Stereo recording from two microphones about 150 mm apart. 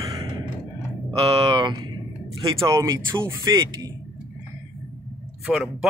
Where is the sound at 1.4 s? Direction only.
30° right (ahead or behind).